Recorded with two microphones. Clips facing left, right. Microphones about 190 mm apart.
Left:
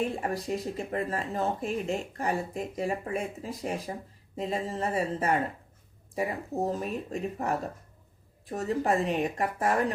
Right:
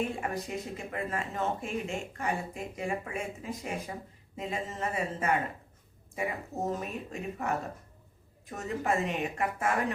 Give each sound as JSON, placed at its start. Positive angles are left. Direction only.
{"t": 0.2, "sound": "speech", "side_deg": 35}